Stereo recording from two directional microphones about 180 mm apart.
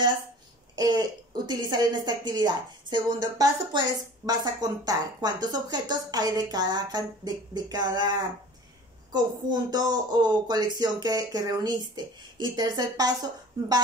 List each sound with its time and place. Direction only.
0.7 s speech: 25° right (ahead or behind)